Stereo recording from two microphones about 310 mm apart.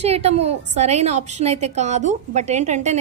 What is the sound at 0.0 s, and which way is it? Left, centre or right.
A woman's voice, centre.